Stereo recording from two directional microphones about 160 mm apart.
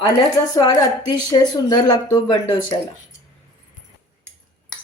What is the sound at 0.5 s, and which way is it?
A woman's voice, 25° left (ahead or behind).